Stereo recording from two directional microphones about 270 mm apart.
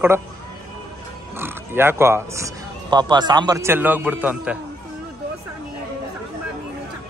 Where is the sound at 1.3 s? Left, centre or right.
Centre.